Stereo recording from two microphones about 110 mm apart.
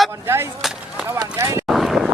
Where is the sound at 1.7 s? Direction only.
Centre (ahead or behind).